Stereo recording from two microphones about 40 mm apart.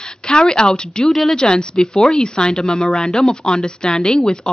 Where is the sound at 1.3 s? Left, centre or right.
Left.